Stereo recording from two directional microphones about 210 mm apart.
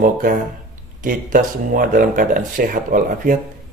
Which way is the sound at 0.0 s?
40° right (ahead or behind).